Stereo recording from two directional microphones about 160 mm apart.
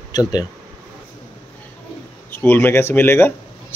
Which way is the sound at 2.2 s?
15° left (ahead or behind).